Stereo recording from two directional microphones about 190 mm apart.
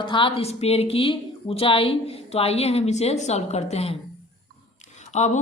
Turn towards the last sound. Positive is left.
turn(degrees=35)  # may be behind; listen again after turning